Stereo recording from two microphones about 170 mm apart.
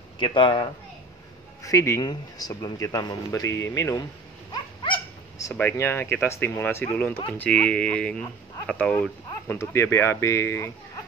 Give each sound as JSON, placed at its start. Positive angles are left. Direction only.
{"t": 0.2, "sound": "a man's voice", "side_deg": 30}
{"t": 1.6, "sound": "a man's voice", "side_deg": 20}
{"t": 4.5, "sound": "dog", "side_deg": 25}
{"t": 5.6, "sound": "speech", "side_deg": 15}